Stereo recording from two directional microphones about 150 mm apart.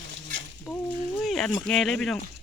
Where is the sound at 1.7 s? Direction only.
5° left (ahead or behind).